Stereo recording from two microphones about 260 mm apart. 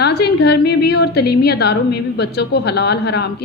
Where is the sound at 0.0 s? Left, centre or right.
Left.